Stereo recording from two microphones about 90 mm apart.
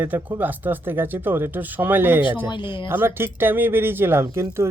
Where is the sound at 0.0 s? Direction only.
20° right (ahead or behind).